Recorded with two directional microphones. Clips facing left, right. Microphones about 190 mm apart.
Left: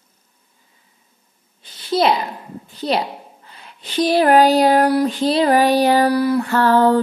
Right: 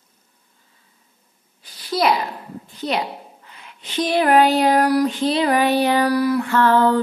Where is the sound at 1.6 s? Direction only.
25° left (ahead or behind).